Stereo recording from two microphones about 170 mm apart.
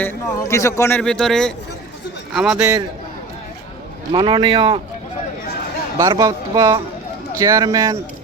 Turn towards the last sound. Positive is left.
turn(degrees=-20)  # may be behind; listen again after turning